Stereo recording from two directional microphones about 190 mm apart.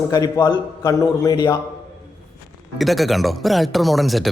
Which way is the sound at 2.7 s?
Centre (ahead or behind).